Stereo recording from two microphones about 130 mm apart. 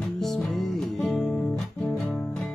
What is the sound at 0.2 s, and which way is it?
Music, centre (ahead or behind).